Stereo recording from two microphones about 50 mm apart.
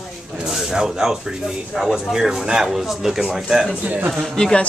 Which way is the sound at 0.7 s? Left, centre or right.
Centre.